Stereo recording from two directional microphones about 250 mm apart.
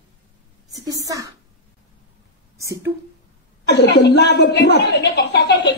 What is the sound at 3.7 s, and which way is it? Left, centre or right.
A woman's voice, left.